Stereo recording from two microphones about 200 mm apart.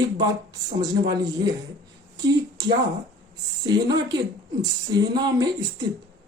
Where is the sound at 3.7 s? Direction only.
20° right (ahead or behind).